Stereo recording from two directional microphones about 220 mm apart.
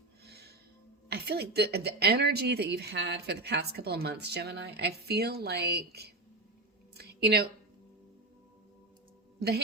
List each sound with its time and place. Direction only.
0.3 s music: 45° right (ahead or behind)
1.1 s speech: 45° right (ahead or behind)
6.9 s a sound: 45° right (ahead or behind)
9.4 s speech: 45° right (ahead or behind)